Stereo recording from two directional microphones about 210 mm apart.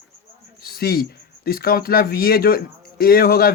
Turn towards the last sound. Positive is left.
turn(degrees=45)  # may be behind; listen again after turning